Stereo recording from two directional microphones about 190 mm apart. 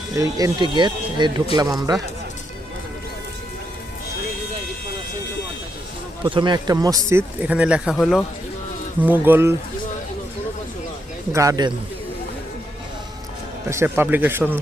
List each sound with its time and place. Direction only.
0.2 s speech: 20° right (ahead or behind)
6.2 s speech: 25° right (ahead or behind)
11.3 s speech: 15° right (ahead or behind)
13.7 s speech: 15° right (ahead or behind)